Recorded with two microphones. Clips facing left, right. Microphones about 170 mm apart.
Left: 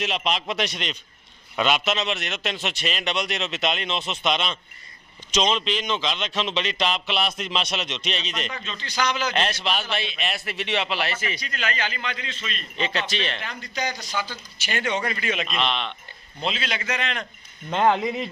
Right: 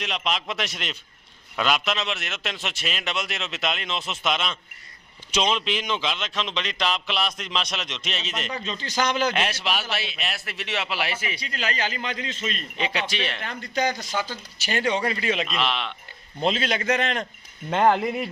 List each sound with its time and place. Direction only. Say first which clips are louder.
0.0 s a man's voice: left 2 dB; centre (ahead or behind)
8.4 s a man's voice: right 3 dB; 35° right (ahead or behind)
9.3 s a man's voice: left 1 dB; 10° right (ahead or behind)
11.3 s a man's voice: even; 30° right (ahead or behind)
12.7 s a man's voice: left 3 dB; 10° right (ahead or behind)
13.7 s a man's voice: right 4 dB; 50° right (ahead or behind); by 15.4 s 30° right (ahead or behind)
15.5 s a man's voice: even; 5° right (ahead or behind)
16.4 s a man's voice: right 5 dB; 45° right (ahead or behind)
17.7 s a man's voice: right 1 dB; 10° right (ahead or behind)